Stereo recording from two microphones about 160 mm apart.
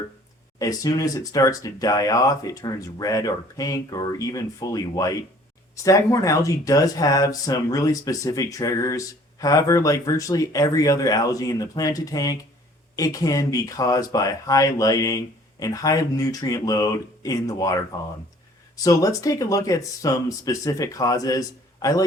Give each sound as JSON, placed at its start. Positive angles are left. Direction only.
{"t": 0.6, "sound": "speech", "side_deg": 20}